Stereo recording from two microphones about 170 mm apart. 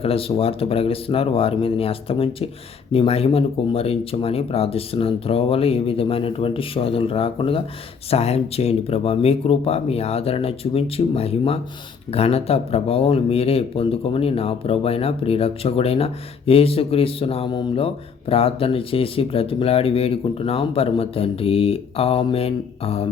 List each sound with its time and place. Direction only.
0.0 s speech: 35° left (ahead or behind)